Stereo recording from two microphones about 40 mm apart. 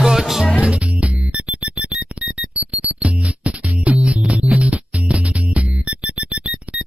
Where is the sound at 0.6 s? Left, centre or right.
Right.